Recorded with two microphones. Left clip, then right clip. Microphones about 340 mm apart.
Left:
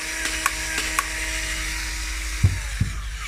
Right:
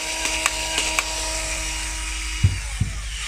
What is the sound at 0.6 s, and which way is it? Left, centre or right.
Printer, right.